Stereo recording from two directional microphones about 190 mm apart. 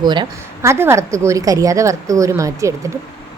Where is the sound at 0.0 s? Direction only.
25° right (ahead or behind).